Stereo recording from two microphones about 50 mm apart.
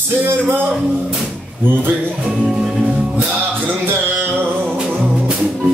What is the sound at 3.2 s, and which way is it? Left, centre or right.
Music, right.